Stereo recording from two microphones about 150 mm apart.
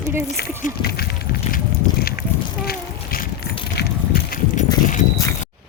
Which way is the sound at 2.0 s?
90° left.